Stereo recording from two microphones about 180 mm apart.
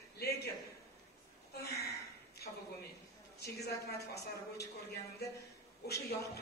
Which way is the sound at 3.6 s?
65° left (ahead or behind).